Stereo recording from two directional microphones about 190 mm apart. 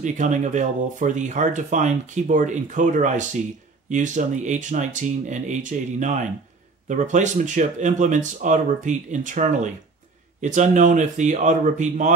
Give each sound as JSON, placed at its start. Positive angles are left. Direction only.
{"t": 0.0, "sound": "speech", "side_deg": -40}